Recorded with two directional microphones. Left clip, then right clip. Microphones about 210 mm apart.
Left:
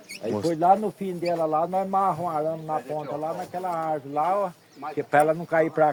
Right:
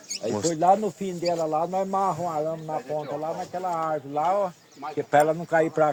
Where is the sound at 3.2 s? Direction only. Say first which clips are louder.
Even; 35° right (ahead or behind).